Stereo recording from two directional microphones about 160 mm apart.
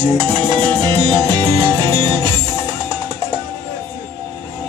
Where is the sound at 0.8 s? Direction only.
25° right (ahead or behind).